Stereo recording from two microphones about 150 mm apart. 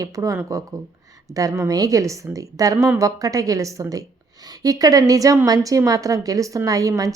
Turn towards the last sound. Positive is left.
turn(degrees=-25)  # may be behind; listen again after turning